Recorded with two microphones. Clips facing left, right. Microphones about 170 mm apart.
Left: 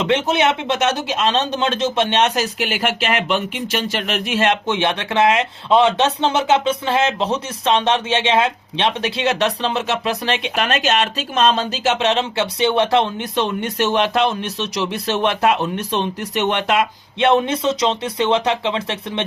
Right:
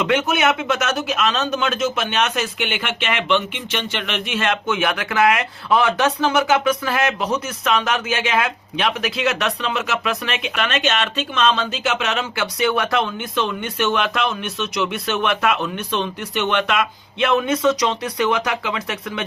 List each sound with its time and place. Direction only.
0.0 s speech: 30° left (ahead or behind)